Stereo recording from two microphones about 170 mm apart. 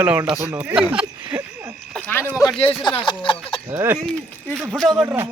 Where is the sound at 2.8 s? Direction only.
30° left (ahead or behind).